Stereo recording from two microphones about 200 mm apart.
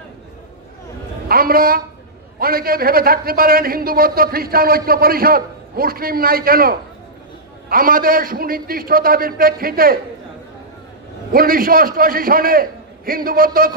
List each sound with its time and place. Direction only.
1.3 s a man's voice: 45° right (ahead or behind)
11.3 s a man's voice: 45° right (ahead or behind)